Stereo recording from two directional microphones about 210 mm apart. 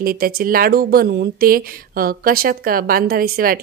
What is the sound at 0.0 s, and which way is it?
Speech, 45° right (ahead or behind).